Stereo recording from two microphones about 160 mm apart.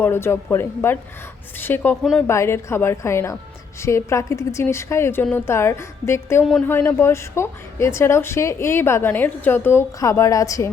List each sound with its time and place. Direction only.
0.0 s a woman's voice: 15° left (ahead or behind)